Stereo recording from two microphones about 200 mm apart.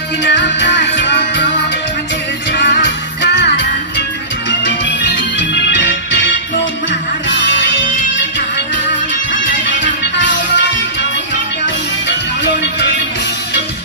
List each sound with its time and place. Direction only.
0.2 s music: 60° left (ahead or behind)
2.5 s music: 55° left (ahead or behind)
5.7 s organ: 60° left (ahead or behind)
7.2 s music: 60° left (ahead or behind)
9.7 s music: 65° left (ahead or behind)